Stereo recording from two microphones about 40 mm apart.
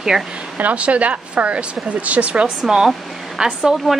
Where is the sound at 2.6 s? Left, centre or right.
Centre.